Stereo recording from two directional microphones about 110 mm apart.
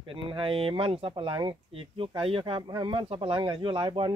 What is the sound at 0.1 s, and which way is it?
Speech, 55° right (ahead or behind).